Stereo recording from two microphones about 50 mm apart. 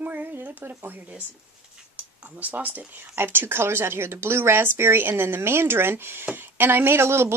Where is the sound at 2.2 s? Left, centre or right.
Right.